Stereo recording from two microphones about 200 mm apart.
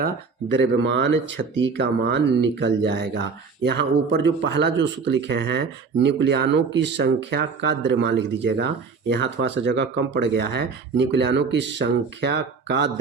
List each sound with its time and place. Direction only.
0.0 s speech: 60° right (ahead or behind)